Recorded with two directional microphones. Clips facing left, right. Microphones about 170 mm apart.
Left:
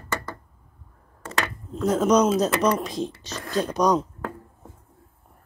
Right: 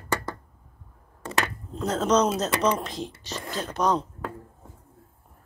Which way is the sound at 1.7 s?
10° left (ahead or behind).